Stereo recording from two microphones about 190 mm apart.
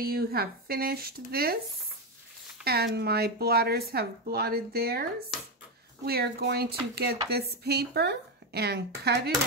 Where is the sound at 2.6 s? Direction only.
55° right (ahead or behind).